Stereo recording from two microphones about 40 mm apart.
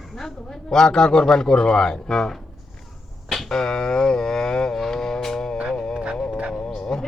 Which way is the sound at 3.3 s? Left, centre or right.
Centre.